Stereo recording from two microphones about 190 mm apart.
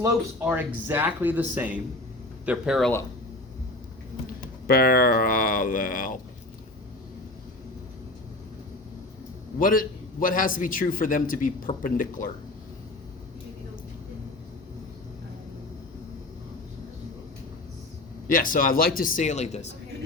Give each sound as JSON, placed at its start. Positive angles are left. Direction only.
{"t": 0.4, "sound": "speech", "side_deg": -10}
{"t": 4.6, "sound": "a man's voice", "side_deg": 50}
{"t": 9.6, "sound": "a man's voice", "side_deg": 45}
{"t": 18.3, "sound": "a man's voice", "side_deg": 45}